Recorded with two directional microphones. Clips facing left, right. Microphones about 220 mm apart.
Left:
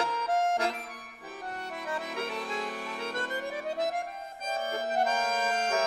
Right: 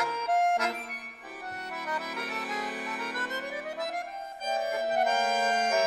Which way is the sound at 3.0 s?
25° left (ahead or behind).